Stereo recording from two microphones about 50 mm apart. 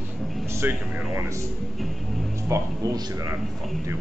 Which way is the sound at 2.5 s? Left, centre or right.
Right.